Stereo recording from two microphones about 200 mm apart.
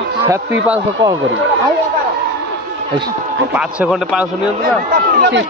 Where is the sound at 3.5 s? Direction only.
5° right (ahead or behind).